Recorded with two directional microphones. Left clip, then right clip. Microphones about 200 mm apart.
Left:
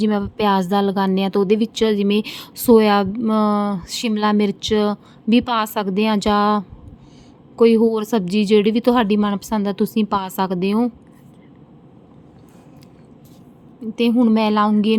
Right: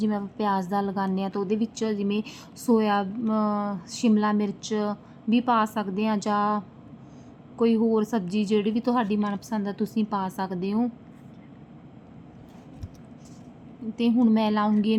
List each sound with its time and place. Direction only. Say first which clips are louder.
0.0 s a woman's voice: left 8 dB; 35° left (ahead or behind)
13.9 s a woman's voice: left 7 dB; 35° left (ahead or behind)